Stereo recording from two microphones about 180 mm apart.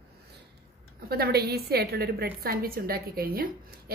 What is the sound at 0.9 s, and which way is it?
A woman's voice, 60° right (ahead or behind).